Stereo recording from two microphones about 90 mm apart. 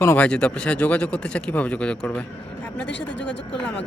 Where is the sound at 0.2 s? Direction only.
15° left (ahead or behind).